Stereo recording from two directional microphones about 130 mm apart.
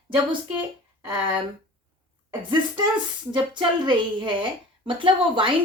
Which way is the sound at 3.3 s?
40° right (ahead or behind).